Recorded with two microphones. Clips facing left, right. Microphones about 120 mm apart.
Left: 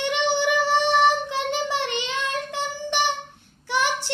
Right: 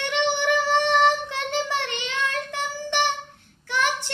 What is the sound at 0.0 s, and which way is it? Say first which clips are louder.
Child singing: left 1 dB; 15° left (ahead or behind).